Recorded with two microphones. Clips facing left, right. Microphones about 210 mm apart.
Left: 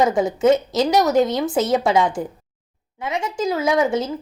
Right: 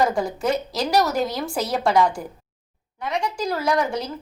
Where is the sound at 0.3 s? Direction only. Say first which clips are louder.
Left 7 dB; 20° left (ahead or behind).